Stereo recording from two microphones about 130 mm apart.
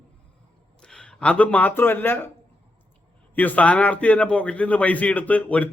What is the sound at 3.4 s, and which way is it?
Speech, 10° left (ahead or behind).